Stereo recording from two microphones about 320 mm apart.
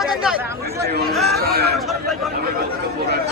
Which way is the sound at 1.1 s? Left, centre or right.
Centre.